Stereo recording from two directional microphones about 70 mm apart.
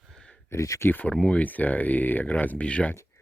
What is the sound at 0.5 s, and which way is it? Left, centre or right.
Speech, left.